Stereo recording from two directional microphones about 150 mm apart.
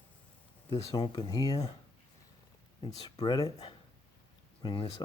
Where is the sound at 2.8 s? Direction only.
25° left (ahead or behind).